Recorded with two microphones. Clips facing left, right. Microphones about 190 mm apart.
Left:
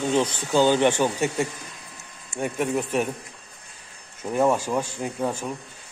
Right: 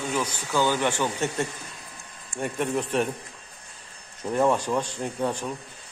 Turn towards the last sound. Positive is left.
turn(degrees=5)  # may be behind; listen again after turning